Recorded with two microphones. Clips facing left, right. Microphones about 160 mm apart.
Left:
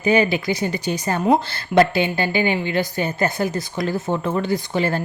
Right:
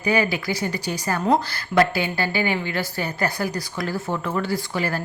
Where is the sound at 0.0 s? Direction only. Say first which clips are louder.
Left 4 dB; 20° left (ahead or behind).